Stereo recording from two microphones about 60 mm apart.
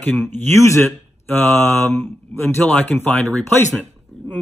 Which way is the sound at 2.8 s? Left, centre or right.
Left.